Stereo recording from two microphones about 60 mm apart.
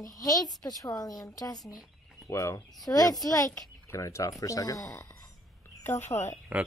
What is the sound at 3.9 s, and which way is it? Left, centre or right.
Speech, left.